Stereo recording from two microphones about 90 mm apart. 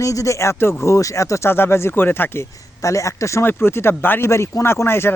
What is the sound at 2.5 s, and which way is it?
Speech, 35° left (ahead or behind).